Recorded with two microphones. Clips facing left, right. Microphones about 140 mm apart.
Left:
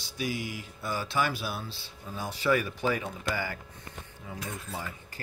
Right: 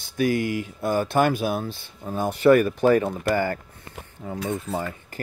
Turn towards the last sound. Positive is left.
turn(degrees=-55)  # may be behind; listen again after turning